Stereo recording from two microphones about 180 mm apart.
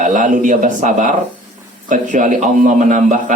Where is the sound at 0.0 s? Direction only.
45° right (ahead or behind).